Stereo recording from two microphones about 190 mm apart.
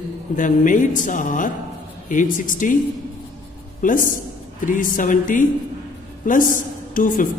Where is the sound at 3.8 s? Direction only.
45° left (ahead or behind).